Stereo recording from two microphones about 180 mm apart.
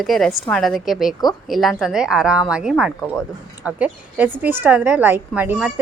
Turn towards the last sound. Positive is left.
turn(degrees=-10)  # may be behind; listen again after turning